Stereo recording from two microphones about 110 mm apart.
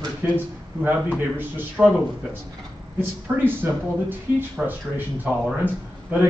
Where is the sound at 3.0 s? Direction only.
20° right (ahead or behind).